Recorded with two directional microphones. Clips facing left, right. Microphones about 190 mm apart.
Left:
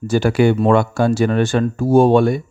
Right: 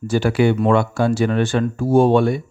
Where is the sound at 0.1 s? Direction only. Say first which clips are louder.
Left 2 dB; 45° left (ahead or behind).